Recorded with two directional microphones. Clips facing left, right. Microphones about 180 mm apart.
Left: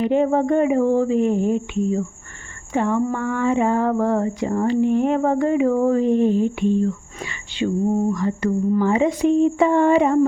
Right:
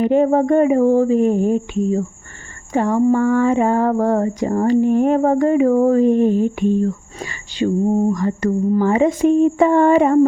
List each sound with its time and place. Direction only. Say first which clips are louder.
0.0 s speech: right 3 dB; 45° right (ahead or behind)